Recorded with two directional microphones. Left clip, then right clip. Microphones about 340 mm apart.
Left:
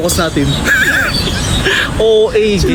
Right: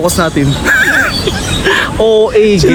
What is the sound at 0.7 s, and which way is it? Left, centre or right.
Neigh, centre.